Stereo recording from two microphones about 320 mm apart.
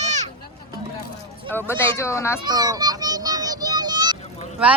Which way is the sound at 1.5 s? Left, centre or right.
Centre.